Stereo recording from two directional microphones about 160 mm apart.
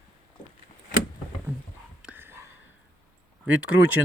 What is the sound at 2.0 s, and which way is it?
Whispering, 10° right (ahead or behind).